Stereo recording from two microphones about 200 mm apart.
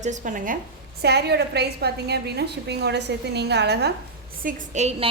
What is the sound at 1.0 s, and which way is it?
A woman's voice, 55° right (ahead or behind).